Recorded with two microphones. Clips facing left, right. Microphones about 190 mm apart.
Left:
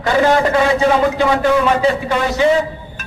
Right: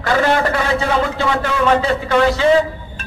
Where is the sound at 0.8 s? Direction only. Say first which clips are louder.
Left 4 dB; 15° left (ahead or behind).